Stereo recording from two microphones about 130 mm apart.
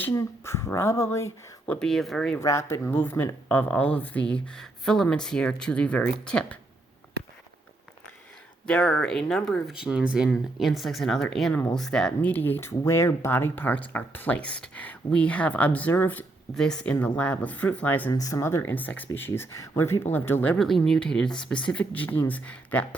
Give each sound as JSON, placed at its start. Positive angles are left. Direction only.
{"t": 0.0, "sound": "speech", "side_deg": 20}
{"t": 1.6, "sound": "speech", "side_deg": 5}
{"t": 2.4, "sound": "speech", "side_deg": 20}
{"t": 8.6, "sound": "speech", "side_deg": 5}
{"t": 18.1, "sound": "speech", "side_deg": 25}